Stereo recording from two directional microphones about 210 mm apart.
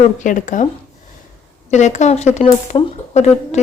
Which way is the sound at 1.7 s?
35° left (ahead or behind).